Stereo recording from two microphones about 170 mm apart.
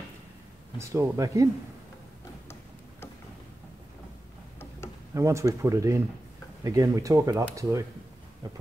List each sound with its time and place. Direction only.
0.7 s speech: 15° right (ahead or behind)
5.1 s speech: 20° right (ahead or behind)